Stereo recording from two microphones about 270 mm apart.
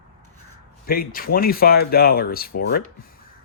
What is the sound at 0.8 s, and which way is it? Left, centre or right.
Speech, left.